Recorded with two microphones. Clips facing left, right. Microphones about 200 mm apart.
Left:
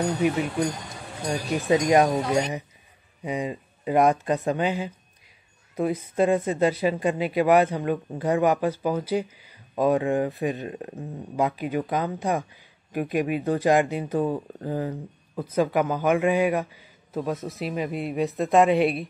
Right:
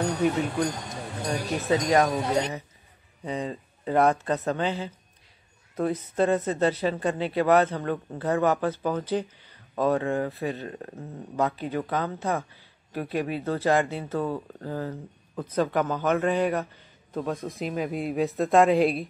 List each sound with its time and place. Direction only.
1.7 s speech: 15° left (ahead or behind); by 19.0 s centre (ahead or behind)